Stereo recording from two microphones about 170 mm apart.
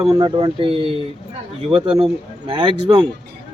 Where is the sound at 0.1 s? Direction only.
30° right (ahead or behind).